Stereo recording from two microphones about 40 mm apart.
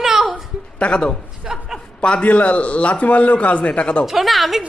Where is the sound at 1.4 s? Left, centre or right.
Centre.